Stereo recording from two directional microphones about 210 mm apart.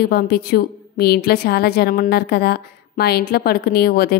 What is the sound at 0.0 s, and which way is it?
A woman's voice, 45° left (ahead or behind).